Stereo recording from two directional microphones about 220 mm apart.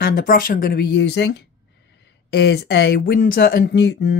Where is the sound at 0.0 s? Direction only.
40° left (ahead or behind).